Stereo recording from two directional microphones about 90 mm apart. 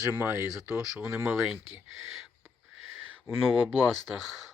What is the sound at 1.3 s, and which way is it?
Speech, 10° right (ahead or behind).